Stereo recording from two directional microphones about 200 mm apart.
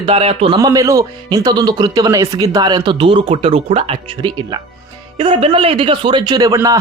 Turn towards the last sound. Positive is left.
turn(degrees=-15)  # may be behind; listen again after turning